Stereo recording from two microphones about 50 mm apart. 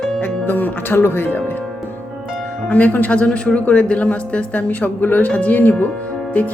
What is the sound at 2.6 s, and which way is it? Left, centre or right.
Speech, left.